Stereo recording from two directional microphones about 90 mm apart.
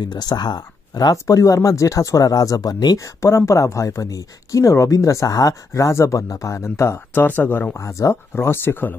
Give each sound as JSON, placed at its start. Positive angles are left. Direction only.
{"t": 0.0, "sound": "speech", "side_deg": 50}
{"t": 1.1, "sound": "speech", "side_deg": 35}
{"t": 3.2, "sound": "speech", "side_deg": 30}
{"t": 7.2, "sound": "speech", "side_deg": 20}
{"t": 7.8, "sound": "speech", "side_deg": 30}